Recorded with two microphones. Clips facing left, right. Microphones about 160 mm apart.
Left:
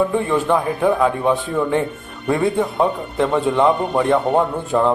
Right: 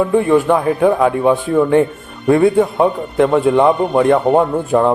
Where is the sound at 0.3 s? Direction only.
15° right (ahead or behind).